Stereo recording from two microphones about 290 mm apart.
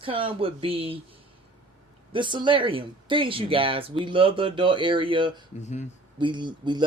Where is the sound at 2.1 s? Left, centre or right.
Centre.